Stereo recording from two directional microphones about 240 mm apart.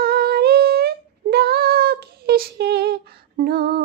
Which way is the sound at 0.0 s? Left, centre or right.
Right.